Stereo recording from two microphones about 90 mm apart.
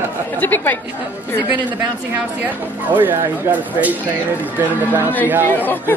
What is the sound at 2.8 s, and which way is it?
Speech, 20° right (ahead or behind).